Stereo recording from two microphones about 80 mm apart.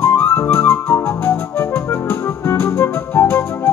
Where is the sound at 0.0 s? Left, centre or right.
Left.